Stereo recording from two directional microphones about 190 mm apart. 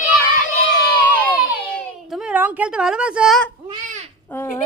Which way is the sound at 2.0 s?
5° right (ahead or behind).